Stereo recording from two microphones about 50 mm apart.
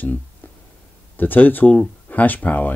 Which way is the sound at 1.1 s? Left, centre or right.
Left.